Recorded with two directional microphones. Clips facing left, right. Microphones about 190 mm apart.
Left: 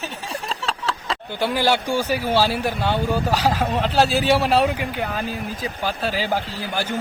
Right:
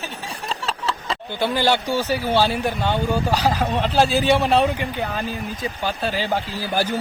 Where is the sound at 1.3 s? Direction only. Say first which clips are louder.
Even; 10° left (ahead or behind).